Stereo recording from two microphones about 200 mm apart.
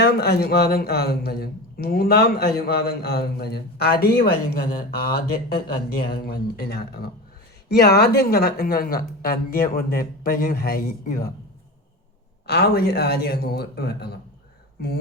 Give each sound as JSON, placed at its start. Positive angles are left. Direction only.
{"t": 0.0, "sound": "speech", "side_deg": 55}
{"t": 12.5, "sound": "speech", "side_deg": 55}